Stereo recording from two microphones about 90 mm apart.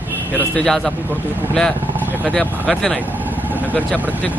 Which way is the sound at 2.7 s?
5° left (ahead or behind).